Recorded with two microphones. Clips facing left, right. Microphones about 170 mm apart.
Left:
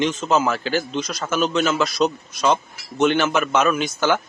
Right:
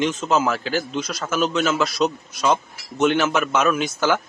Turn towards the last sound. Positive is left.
turn(degrees=0)  # may be behind; listen again after turning